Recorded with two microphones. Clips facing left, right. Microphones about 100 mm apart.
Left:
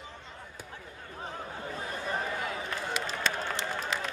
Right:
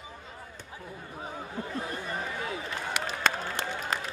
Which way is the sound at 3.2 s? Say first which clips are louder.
Right 5 dB; 50° right (ahead or behind).